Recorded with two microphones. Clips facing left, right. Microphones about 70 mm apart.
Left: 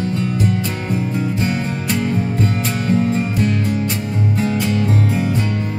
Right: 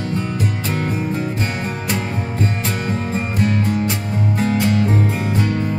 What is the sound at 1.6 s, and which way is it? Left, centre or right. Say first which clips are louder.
Music: left 3 dB; right.